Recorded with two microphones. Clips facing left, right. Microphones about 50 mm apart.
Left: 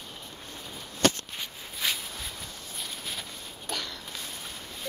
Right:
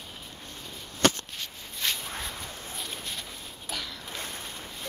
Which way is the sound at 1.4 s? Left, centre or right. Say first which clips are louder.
Left 1 dB; centre.